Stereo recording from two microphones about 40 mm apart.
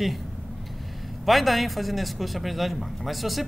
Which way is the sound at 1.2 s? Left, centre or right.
Centre.